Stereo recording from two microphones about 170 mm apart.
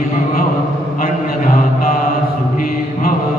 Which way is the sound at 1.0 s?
55° left (ahead or behind).